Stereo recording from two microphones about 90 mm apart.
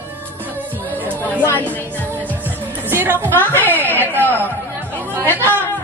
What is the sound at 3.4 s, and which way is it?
Speech, 20° left (ahead or behind).